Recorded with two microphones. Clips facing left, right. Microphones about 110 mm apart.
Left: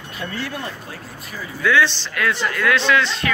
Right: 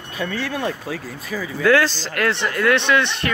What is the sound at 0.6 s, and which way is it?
Speech, 90° right.